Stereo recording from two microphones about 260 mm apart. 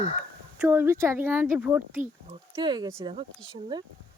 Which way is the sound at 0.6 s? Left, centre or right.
Centre.